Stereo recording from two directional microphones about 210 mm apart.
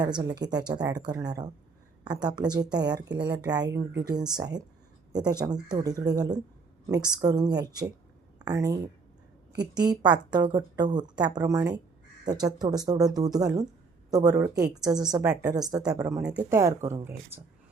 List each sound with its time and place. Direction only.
0.0 s a woman's voice: 20° right (ahead or behind)